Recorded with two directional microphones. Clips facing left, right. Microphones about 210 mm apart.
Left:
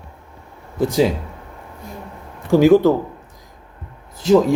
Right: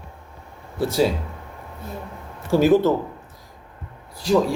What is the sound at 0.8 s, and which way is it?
Speech, 15° left (ahead or behind).